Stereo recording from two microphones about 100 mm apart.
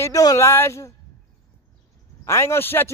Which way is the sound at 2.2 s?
25° left (ahead or behind).